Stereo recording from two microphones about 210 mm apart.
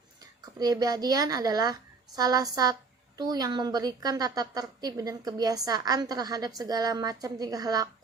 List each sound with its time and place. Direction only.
0.4 s a woman's voice: 20° right (ahead or behind)